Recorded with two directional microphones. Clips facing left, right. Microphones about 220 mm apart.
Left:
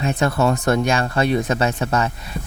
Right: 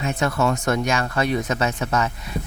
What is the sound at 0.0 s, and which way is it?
Speech, 30° left (ahead or behind).